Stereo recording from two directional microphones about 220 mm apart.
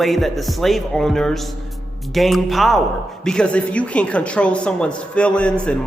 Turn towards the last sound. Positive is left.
turn(degrees=5)  # may be behind; listen again after turning